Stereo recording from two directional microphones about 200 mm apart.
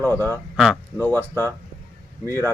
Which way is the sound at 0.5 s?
5° right (ahead or behind).